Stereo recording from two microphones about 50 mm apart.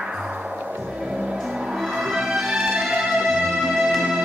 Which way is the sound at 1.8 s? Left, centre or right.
Centre.